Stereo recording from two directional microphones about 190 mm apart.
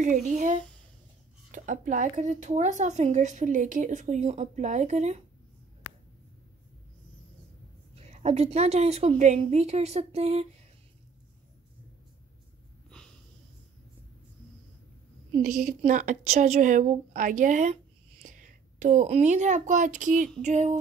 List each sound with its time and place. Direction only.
0.0 s a woman's voice: 40° right (ahead or behind)
7.9 s a woman's voice: 35° right (ahead or behind)
15.4 s a woman's voice: 40° right (ahead or behind)